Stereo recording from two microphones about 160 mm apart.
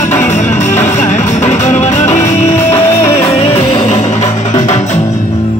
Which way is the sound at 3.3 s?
35° left (ahead or behind).